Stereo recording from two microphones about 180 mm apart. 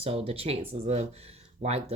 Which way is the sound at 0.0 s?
35° right (ahead or behind).